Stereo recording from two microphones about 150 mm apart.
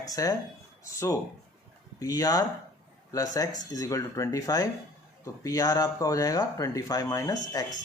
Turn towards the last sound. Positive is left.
turn(degrees=25)  # may be behind; listen again after turning